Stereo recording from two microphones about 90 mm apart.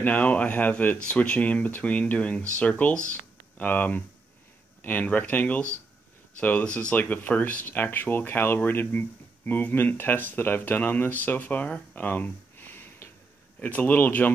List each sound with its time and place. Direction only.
0.0 s speech: 15° left (ahead or behind)